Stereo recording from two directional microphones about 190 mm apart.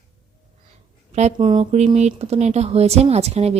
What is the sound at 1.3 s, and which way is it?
Speech, 25° right (ahead or behind).